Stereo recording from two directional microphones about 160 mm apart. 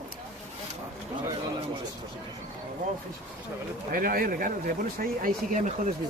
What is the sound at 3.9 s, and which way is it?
Speech, 65° right (ahead or behind).